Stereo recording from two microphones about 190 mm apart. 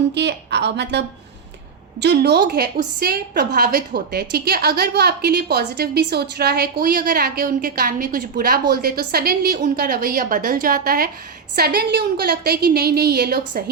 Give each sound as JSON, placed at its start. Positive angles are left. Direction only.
{"t": 0.1, "sound": "a woman's voice", "side_deg": -65}